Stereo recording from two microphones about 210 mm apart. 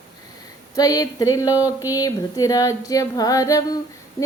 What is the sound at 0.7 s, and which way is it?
Female singing, 15° left (ahead or behind).